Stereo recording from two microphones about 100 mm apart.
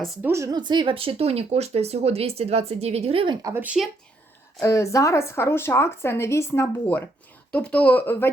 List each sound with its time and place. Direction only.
0.2 s speech: 25° right (ahead or behind)
0.5 s speech: 50° right (ahead or behind); by 3.3 s 70° right (ahead or behind)
3.5 s speech: 15° right (ahead or behind)
4.6 s a woman's voice: 30° left (ahead or behind)